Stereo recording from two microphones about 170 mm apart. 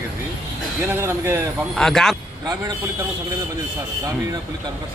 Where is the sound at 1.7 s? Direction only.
5° left (ahead or behind).